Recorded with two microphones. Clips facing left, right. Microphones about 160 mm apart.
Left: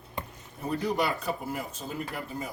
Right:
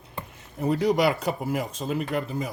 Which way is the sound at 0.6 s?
90° right.